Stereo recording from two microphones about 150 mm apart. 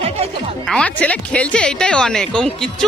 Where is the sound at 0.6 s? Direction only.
5° left (ahead or behind).